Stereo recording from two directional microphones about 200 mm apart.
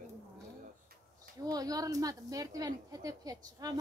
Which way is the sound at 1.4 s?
20° right (ahead or behind).